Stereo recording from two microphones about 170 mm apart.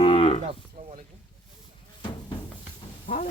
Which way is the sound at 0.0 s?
35° left (ahead or behind).